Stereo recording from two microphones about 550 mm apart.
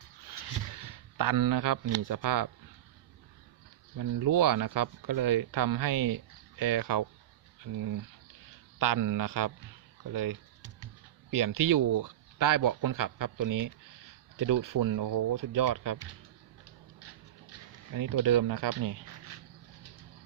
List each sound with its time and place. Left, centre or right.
0.8 s speech: right
3.9 s speech: right
10.1 s typing: right
11.3 s speech: right
17.9 s speech: right